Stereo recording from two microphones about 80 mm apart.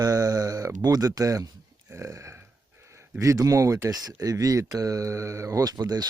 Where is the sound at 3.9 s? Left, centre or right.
Right.